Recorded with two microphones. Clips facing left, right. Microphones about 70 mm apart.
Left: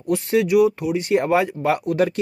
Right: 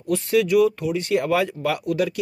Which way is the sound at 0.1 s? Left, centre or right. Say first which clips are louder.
Left 1 dB; left.